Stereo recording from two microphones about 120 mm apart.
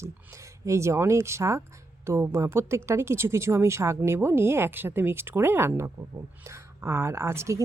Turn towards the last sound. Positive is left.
turn(degrees=-25)  # may be behind; listen again after turning